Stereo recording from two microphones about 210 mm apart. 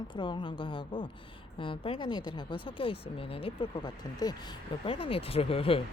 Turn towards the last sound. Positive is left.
turn(degrees=25)  # may be behind; listen again after turning